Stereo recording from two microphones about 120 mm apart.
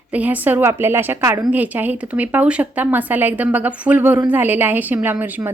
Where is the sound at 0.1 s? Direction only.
10° right (ahead or behind).